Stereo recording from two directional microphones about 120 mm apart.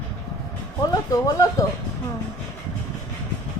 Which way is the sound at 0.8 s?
30° left (ahead or behind).